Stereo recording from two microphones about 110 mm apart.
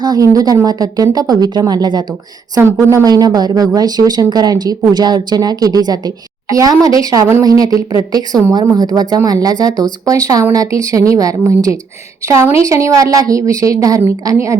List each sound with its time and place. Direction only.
0.0 s speech: 35° right (ahead or behind)
2.6 s a woman's voice: 25° right (ahead or behind)
2.9 s a woman's voice: 35° right (ahead or behind)